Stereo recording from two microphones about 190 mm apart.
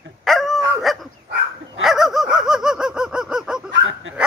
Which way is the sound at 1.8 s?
Centre (ahead or behind).